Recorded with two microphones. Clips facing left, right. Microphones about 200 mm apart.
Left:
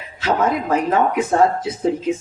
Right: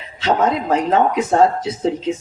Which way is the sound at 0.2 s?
25° right (ahead or behind).